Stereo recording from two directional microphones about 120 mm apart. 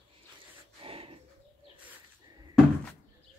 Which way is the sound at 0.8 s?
50° right (ahead or behind).